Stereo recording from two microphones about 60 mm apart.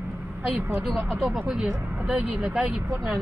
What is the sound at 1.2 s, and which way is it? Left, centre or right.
Speech, centre.